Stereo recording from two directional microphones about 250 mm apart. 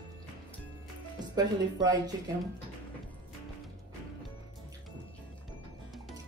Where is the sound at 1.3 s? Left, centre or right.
Centre.